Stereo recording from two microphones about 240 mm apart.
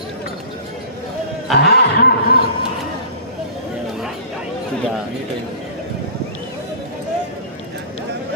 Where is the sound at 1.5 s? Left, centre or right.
Left.